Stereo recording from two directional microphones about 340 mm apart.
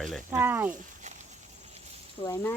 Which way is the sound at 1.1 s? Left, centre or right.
Centre.